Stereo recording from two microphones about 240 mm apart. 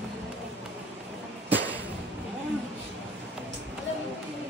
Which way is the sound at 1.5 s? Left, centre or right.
Centre.